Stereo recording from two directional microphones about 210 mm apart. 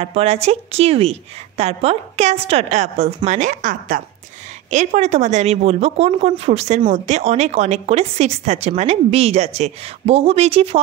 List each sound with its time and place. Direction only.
0.0 s a woman's voice: 30° right (ahead or behind)